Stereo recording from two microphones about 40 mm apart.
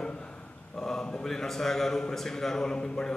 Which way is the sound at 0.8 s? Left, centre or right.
Centre.